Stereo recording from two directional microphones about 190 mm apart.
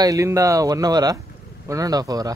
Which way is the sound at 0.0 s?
15° right (ahead or behind).